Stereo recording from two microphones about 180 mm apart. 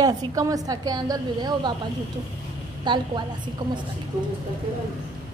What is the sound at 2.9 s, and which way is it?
Speech, 25° right (ahead or behind).